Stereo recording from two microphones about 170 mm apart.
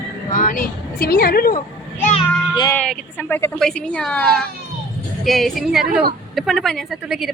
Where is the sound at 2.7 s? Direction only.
5° left (ahead or behind).